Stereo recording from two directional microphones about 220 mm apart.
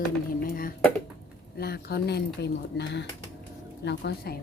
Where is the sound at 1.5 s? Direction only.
45° left (ahead or behind).